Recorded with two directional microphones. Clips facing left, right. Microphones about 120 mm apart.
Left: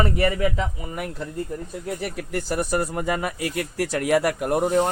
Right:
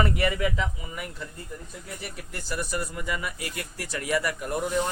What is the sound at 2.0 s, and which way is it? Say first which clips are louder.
Speech: left 10 dB; 80° left.